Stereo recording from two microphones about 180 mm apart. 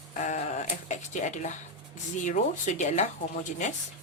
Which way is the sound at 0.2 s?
45° left (ahead or behind).